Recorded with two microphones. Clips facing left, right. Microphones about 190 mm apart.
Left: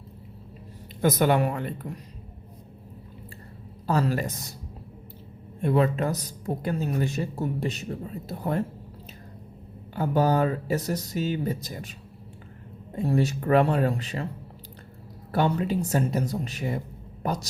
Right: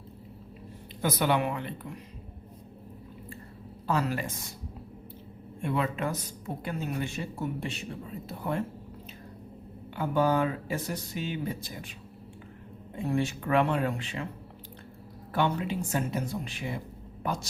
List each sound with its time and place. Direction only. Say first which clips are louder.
1.0 s speech: left 5 dB; 45° left (ahead or behind)
3.8 s a woman's voice: left 4 dB; 40° left (ahead or behind)
5.6 s a woman's voice: left 6 dB; 40° left (ahead or behind)
9.9 s a woman's voice: left 3 dB; 40° left (ahead or behind)
13.0 s a woman's voice: left 4 dB; 40° left (ahead or behind)
15.3 s a woman's voice: left 4 dB; 40° left (ahead or behind)